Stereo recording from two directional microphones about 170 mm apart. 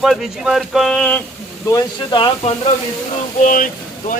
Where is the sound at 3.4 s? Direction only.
50° left (ahead or behind).